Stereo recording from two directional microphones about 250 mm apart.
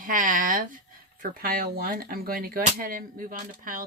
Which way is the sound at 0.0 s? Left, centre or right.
Right.